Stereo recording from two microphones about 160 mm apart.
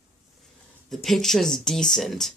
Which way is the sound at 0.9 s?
Centre (ahead or behind).